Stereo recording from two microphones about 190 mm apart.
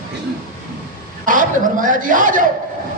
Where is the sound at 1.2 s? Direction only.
45° right (ahead or behind).